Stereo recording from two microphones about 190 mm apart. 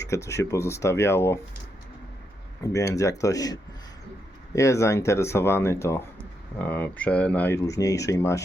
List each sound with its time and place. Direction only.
0.0 s speech: 15° left (ahead or behind)
2.7 s speech: 15° left (ahead or behind)